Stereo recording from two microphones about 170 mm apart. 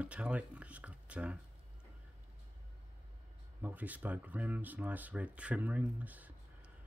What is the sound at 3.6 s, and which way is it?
Speech, 10° right (ahead or behind).